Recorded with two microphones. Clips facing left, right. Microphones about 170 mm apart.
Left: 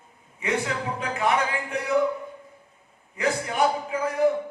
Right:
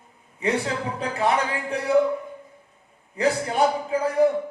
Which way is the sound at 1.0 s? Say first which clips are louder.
Right 2 dB; 30° right (ahead or behind).